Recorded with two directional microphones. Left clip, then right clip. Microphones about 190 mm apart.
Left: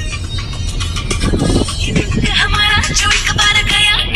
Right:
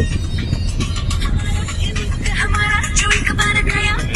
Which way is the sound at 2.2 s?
25° left (ahead or behind).